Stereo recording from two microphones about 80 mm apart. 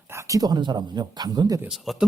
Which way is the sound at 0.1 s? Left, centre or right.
Right.